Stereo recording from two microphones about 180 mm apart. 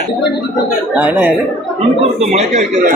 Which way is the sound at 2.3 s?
40° right (ahead or behind).